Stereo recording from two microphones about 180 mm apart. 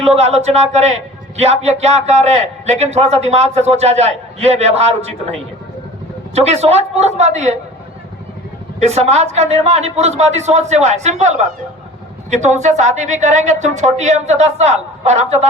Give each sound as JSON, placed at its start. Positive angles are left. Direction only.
{"t": 0.0, "sound": "a man's voice", "side_deg": -35}
{"t": 6.3, "sound": "a man's voice", "side_deg": -35}
{"t": 8.8, "sound": "a man's voice", "side_deg": -35}